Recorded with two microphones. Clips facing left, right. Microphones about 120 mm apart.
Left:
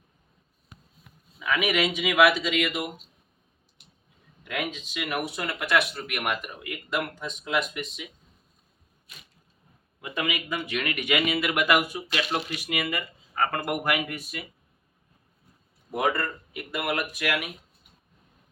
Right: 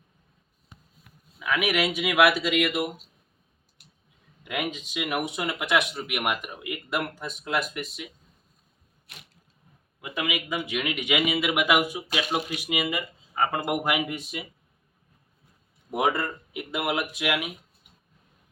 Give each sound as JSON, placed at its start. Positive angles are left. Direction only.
{"t": 1.4, "sound": "speech", "side_deg": -5}
{"t": 4.4, "sound": "speech", "side_deg": -10}
{"t": 9.1, "sound": "a sound", "side_deg": -85}
{"t": 10.0, "sound": "speech", "side_deg": -5}
{"t": 15.9, "sound": "speech", "side_deg": -15}